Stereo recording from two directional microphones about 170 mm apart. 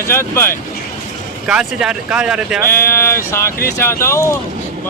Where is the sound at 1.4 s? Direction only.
5° right (ahead or behind).